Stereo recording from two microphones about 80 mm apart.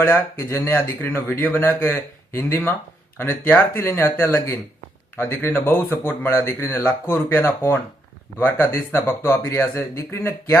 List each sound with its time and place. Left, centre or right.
0.0 s speech: left